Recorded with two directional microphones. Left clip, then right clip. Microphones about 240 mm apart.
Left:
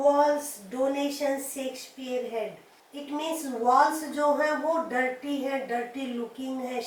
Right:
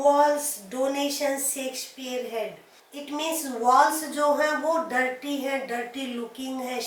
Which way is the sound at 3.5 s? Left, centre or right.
Centre.